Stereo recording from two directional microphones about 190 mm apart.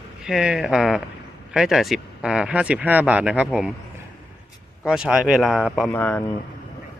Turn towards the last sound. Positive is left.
turn(degrees=10)  # may be behind; listen again after turning